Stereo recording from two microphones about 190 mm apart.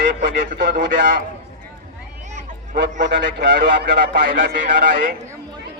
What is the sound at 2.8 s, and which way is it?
A man's voice, 70° right (ahead or behind).